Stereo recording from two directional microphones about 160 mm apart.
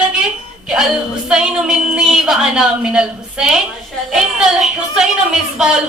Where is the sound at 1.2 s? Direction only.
5° right (ahead or behind).